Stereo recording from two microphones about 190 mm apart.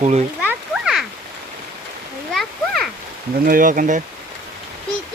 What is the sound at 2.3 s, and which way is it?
Splash, centre (ahead or behind).